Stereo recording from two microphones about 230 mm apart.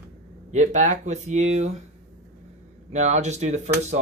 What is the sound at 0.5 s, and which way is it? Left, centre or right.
Speech, right.